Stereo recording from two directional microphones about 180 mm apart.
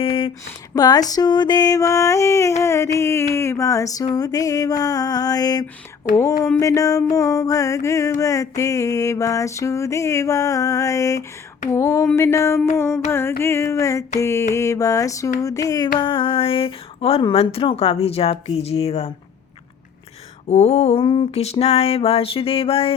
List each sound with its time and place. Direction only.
0.0 s a sound: 30° left (ahead or behind)
0.7 s music: 20° left (ahead or behind)
16.0 s speech: 30° left (ahead or behind)
20.5 s speech: 35° left (ahead or behind)